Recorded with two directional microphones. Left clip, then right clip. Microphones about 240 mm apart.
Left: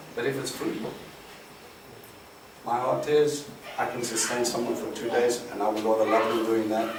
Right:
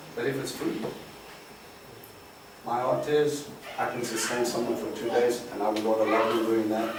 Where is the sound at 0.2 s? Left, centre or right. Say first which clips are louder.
Left 1 dB; centre.